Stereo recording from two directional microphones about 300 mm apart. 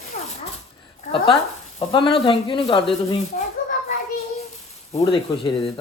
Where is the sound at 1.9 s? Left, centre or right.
Centre.